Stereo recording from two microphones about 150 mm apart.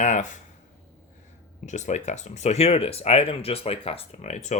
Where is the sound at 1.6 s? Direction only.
50° left (ahead or behind).